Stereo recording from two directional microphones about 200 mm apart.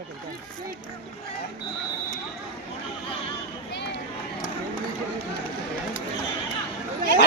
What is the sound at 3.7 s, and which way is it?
Run, 60° left (ahead or behind).